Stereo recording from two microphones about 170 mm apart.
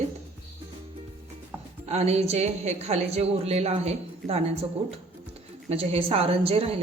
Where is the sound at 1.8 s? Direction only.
40° right (ahead or behind).